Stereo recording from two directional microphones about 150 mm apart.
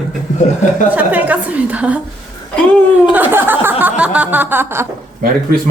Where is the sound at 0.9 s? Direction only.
10° right (ahead or behind).